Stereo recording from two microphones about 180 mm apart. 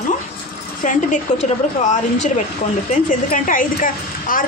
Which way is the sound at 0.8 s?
45° left (ahead or behind).